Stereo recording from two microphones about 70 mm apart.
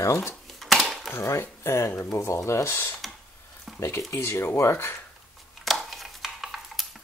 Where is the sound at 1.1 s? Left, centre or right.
Left.